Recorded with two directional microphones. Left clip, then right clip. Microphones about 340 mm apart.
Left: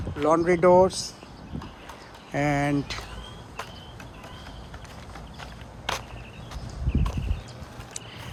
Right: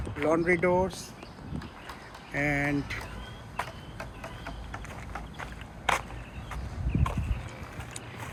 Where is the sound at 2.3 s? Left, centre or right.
Left.